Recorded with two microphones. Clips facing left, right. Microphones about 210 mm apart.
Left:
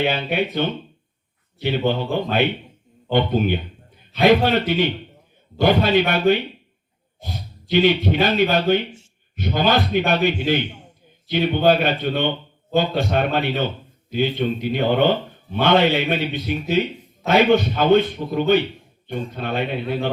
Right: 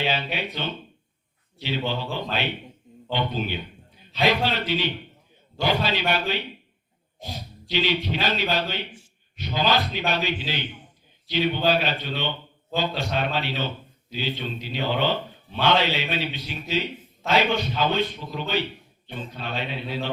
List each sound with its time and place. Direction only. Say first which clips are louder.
0.0 s a man's voice: left 6 dB; 50° left (ahead or behind)
7.7 s a man's voice: left 8 dB; 50° left (ahead or behind)